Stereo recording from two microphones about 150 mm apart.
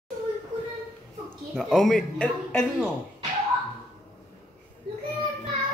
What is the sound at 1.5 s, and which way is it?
A woman's voice, 5° left (ahead or behind).